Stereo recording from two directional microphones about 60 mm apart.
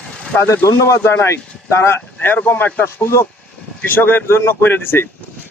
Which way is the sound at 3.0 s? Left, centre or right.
Left.